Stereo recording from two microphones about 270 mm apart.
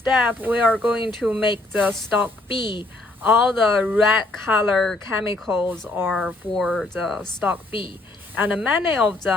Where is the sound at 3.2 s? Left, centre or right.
Centre.